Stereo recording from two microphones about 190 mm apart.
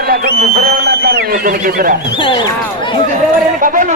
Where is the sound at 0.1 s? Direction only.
55° right (ahead or behind).